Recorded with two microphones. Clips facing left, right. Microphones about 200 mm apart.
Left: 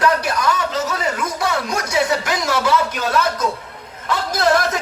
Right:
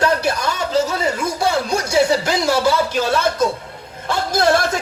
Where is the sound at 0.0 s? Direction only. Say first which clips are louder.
Even; 30° right (ahead or behind).